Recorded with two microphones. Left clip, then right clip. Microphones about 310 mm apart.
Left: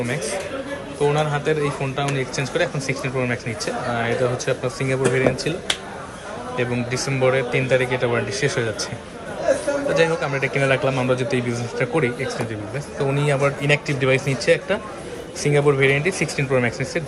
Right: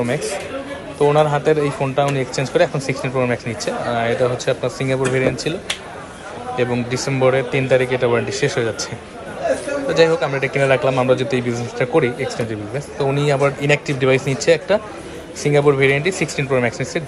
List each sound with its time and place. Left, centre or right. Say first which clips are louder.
0.9 s speech: right 6 dB; centre
6.6 s speech: right 4 dB; centre
9.9 s speech: right 6 dB; centre